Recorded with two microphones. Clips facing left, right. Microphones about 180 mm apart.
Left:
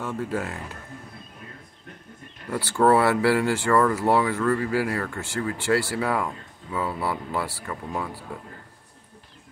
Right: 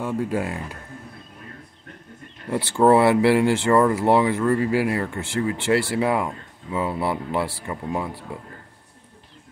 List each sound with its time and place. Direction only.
0.0 s speech: 15° right (ahead or behind)
2.5 s speech: 25° right (ahead or behind)